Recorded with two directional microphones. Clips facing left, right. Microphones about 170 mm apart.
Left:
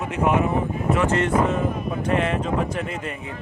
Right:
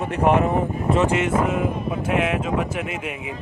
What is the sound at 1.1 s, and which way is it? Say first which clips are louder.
Speech: even; 10° right (ahead or behind).